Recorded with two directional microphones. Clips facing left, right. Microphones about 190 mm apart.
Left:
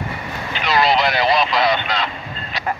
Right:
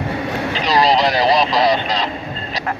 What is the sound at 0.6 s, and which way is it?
Vehicle, 35° right (ahead or behind).